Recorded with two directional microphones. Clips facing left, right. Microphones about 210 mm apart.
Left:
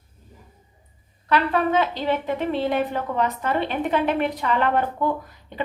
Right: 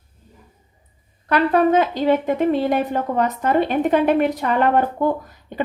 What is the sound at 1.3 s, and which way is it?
A woman's voice, 45° right (ahead or behind).